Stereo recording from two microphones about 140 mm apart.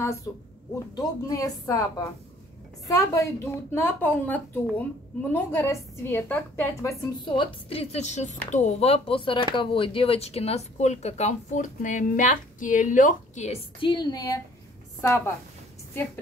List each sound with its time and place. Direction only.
0.0 s a woman's voice: 20° left (ahead or behind)
7.2 s speech: 40° left (ahead or behind); by 13.6 s 55° left (ahead or behind)
13.7 s a woman's voice: 35° left (ahead or behind)